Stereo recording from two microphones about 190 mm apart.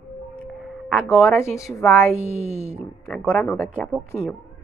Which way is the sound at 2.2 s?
35° left (ahead or behind).